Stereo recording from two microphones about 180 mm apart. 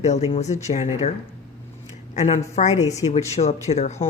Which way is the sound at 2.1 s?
40° left (ahead or behind).